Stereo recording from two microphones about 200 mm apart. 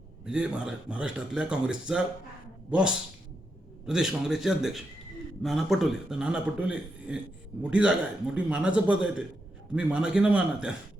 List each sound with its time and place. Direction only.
0.3 s a man's voice: 5° right (ahead or behind)